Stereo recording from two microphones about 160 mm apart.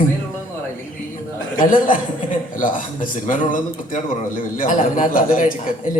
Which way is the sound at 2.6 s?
55° left (ahead or behind).